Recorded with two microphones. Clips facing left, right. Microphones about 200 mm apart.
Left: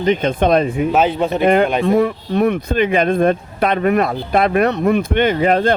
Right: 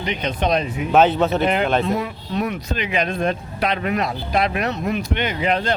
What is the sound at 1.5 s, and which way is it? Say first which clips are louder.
Speech: left 6 dB; 50° left (ahead or behind).